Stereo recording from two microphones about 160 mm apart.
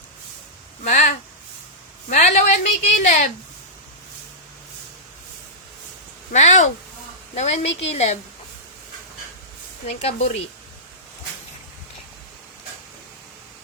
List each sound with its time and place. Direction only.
0.9 s a woman's voice: 50° left (ahead or behind)
6.3 s a woman's voice: 45° left (ahead or behind)
9.8 s speech: 40° left (ahead or behind)